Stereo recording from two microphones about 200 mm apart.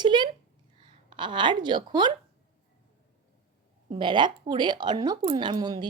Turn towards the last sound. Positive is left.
turn(degrees=-20)  # may be behind; listen again after turning